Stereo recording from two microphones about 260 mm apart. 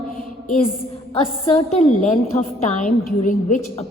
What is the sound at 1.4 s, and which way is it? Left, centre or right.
A woman's voice, left.